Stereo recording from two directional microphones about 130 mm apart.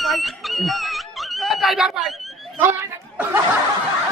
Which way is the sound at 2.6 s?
15° right (ahead or behind).